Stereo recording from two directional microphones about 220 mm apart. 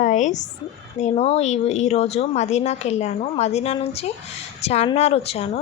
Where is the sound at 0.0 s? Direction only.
35° left (ahead or behind).